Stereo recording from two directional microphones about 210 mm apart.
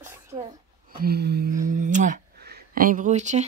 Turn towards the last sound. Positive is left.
turn(degrees=-35)  # may be behind; listen again after turning